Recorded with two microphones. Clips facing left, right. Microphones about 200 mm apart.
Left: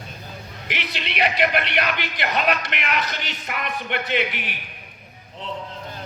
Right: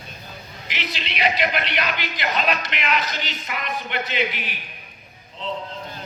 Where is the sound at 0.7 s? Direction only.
60° left (ahead or behind).